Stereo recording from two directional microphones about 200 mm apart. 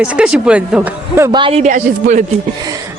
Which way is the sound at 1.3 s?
30° right (ahead or behind).